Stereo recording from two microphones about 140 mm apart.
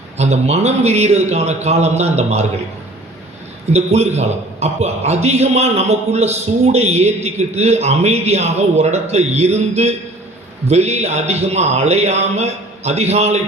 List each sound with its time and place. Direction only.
0.2 s a man's voice: 50° right (ahead or behind)
3.7 s a man's voice: 50° right (ahead or behind)